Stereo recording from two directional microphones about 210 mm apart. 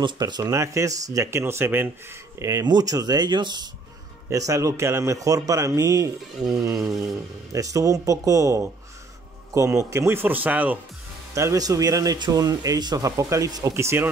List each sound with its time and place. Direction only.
0.0 s speech: 20° right (ahead or behind)